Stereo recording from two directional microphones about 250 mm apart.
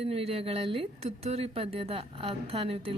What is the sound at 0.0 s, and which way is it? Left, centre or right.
A woman's voice, right.